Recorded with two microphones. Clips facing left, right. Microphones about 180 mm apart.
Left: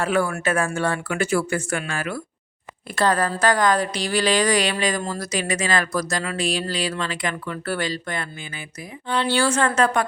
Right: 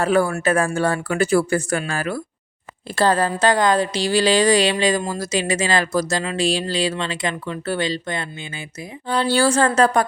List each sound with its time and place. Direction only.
0.0 s a woman's voice: 35° right (ahead or behind)
9.0 s speech: 35° right (ahead or behind)